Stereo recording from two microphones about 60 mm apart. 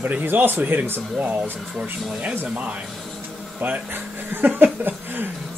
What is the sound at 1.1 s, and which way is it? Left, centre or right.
Speech, right.